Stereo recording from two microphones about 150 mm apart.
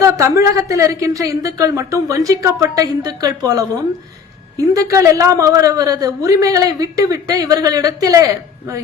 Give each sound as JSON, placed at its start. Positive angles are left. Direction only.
{"t": 0.0, "sound": "a man's voice", "side_deg": -20}
{"t": 4.7, "sound": "a man's voice", "side_deg": -20}